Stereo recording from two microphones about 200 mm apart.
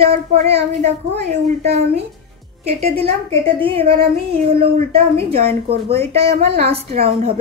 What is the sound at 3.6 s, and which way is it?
Child singing, 30° right (ahead or behind).